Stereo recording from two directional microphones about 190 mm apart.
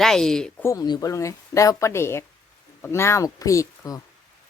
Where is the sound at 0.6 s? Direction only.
20° left (ahead or behind).